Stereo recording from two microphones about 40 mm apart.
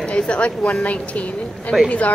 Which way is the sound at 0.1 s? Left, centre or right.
Left.